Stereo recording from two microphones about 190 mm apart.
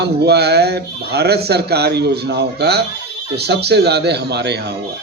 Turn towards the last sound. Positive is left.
turn(degrees=-60)  # may be behind; listen again after turning